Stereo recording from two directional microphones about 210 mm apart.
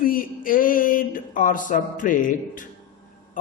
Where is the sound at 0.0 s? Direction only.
40° left (ahead or behind).